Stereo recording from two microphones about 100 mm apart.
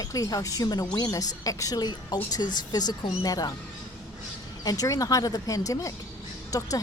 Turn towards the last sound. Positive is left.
turn(degrees=35)  # may be behind; listen again after turning